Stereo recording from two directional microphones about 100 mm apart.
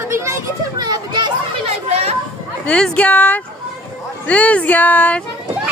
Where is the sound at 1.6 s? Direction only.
90° right.